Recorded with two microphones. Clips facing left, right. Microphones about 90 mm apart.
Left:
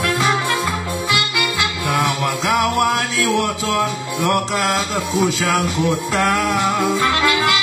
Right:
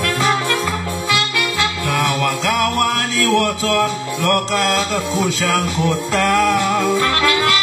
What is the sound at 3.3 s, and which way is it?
Music, 55° right (ahead or behind).